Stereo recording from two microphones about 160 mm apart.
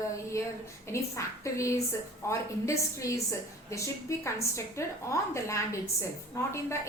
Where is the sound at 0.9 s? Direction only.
20° left (ahead or behind).